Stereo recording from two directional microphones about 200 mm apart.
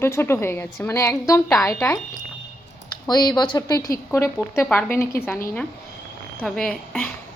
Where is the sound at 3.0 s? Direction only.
20° left (ahead or behind); by 7.0 s 5° left (ahead or behind).